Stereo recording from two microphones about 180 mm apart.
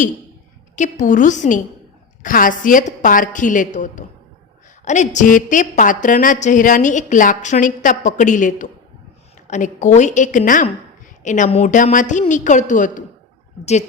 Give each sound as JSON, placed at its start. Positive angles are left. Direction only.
{"t": 0.8, "sound": "a woman's voice", "side_deg": 45}